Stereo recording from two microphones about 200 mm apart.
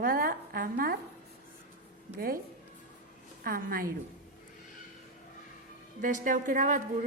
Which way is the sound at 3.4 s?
45° right (ahead or behind).